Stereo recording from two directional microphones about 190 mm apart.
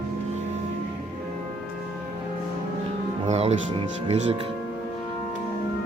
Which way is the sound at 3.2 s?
35° right (ahead or behind).